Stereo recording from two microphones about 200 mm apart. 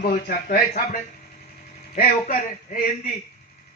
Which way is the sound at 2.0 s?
40° left (ahead or behind).